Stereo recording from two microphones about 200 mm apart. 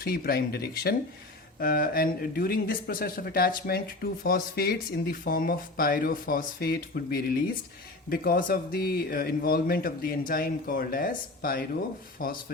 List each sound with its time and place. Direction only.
0.0 s speech: 50° left (ahead or behind)